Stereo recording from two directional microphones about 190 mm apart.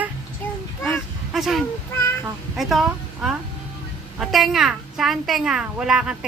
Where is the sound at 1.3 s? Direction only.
Centre (ahead or behind).